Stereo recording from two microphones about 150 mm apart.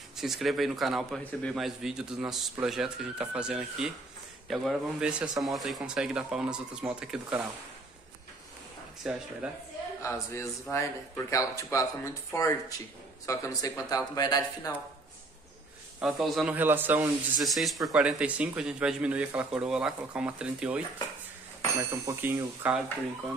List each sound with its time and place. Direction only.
0.2 s a man's voice: centre (ahead or behind)
1.6 s speech: 5° right (ahead or behind)
9.0 s speech: 5° right (ahead or behind)
10.0 s a man's voice: 20° left (ahead or behind)
16.0 s speech: 5° right (ahead or behind)
17.4 s speech: centre (ahead or behind)
22.0 s speech: 15° right (ahead or behind)